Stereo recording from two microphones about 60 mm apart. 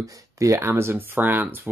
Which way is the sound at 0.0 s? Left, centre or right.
Right.